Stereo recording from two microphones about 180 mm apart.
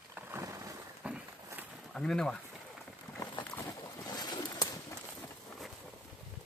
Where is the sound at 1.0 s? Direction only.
5° right (ahead or behind).